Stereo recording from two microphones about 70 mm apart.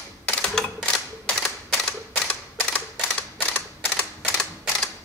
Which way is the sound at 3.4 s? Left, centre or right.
Left.